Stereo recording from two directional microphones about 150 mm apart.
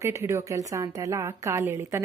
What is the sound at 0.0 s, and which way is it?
A woman's voice, 20° right (ahead or behind).